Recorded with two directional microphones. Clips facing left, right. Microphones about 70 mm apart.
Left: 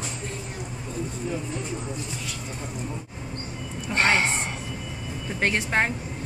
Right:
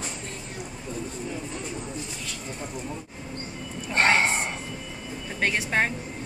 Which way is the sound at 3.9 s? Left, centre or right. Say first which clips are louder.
Right 1 dB; right.